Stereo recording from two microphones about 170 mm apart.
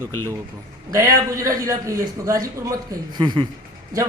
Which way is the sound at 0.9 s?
20° right (ahead or behind).